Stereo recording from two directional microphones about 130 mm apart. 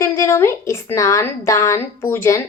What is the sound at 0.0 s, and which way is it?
Speech, 20° left (ahead or behind).